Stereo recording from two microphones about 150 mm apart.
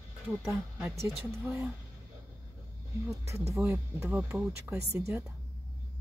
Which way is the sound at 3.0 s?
20° right (ahead or behind).